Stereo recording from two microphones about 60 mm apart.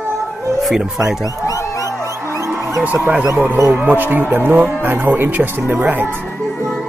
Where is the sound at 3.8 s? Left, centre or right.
Right.